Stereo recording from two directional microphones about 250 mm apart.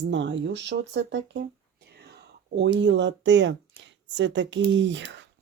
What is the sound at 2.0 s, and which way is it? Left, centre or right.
Whispering, right.